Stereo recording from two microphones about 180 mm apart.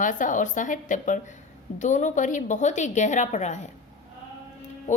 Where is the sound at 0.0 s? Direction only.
45° left (ahead or behind).